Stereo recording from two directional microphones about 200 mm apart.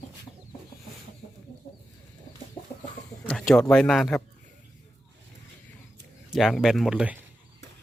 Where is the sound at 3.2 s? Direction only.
Centre (ahead or behind).